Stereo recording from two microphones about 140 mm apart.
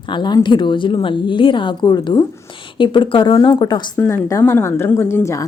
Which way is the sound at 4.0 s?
10° left (ahead or behind).